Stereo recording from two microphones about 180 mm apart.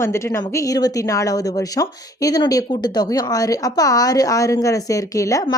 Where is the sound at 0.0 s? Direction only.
15° left (ahead or behind).